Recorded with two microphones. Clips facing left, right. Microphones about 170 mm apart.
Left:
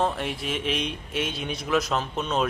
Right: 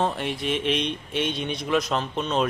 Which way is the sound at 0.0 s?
Centre (ahead or behind).